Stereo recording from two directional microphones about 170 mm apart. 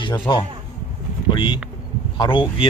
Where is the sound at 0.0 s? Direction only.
25° left (ahead or behind).